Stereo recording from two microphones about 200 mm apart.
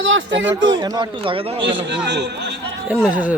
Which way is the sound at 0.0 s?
65° right (ahead or behind).